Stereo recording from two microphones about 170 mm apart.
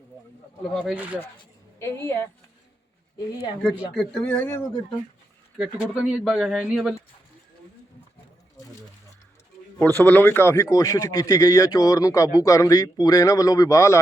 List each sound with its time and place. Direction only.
0.6 s speech: 5° left (ahead or behind)
1.8 s a woman's voice: 15° left (ahead or behind)
3.9 s speech: 5° left (ahead or behind)
5.5 s speech: 5° right (ahead or behind)
9.7 s a man's voice: 10° left (ahead or behind)